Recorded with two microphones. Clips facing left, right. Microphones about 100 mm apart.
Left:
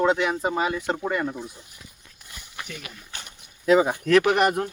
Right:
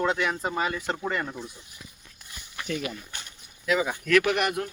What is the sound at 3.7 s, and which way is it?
Speech, 30° left (ahead or behind).